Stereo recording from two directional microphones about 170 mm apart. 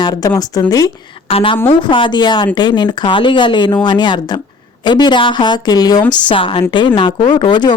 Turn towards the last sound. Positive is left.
turn(degrees=25)  # may be behind; listen again after turning